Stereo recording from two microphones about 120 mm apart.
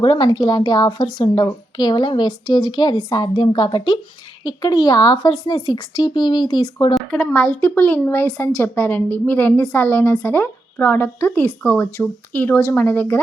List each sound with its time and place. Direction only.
0.0 s a woman's voice: 40° left (ahead or behind)
7.1 s a woman's voice: 10° left (ahead or behind)